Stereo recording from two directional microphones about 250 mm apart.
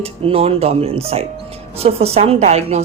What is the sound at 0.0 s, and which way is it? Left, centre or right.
Speech, right.